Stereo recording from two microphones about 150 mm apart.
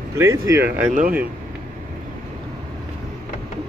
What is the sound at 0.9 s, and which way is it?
Speech, 60° right (ahead or behind).